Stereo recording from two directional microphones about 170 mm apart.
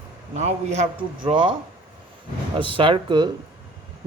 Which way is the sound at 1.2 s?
30° right (ahead or behind).